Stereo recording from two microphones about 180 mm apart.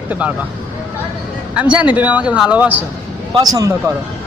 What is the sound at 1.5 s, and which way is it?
Speech, 5° right (ahead or behind).